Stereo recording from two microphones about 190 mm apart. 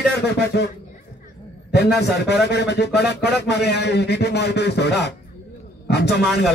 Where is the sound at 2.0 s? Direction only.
60° left (ahead or behind).